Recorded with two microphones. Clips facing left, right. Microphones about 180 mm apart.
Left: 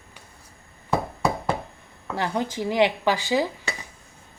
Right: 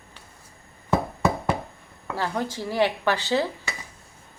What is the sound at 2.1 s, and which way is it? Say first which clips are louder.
Speech: left 2 dB; 15° left (ahead or behind).